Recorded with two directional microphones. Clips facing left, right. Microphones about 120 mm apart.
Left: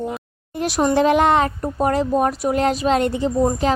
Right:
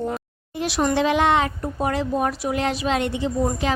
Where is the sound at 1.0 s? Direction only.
45° left (ahead or behind).